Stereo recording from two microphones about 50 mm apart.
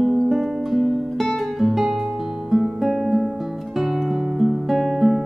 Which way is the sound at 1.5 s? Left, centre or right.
Centre.